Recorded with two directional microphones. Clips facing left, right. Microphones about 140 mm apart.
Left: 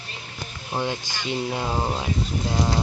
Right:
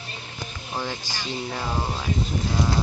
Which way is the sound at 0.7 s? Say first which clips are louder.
Left 4 dB; 15° left (ahead or behind).